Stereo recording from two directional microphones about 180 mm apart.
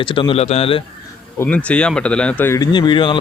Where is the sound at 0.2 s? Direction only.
30° left (ahead or behind).